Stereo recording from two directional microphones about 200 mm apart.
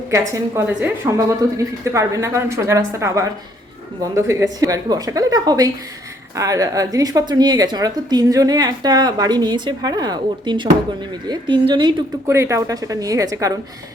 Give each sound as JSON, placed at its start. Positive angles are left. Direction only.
{"t": 0.1, "sound": "a woman's voice", "side_deg": -15}